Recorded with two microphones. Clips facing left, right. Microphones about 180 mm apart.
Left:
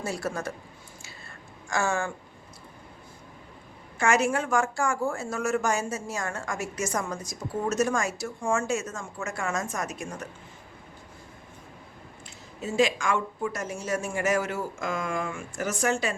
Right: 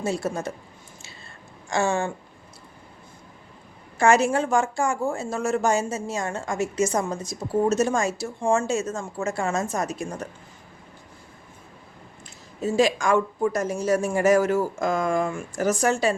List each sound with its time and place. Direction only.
0.0 s speech: 20° right (ahead or behind)
1.7 s speech: 25° right (ahead or behind)
3.9 s speech: 30° right (ahead or behind)
12.6 s speech: 40° right (ahead or behind)